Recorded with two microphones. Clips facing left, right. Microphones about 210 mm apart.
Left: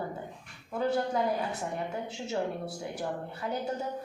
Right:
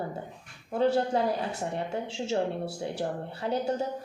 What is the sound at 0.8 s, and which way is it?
A woman's voice, 30° right (ahead or behind).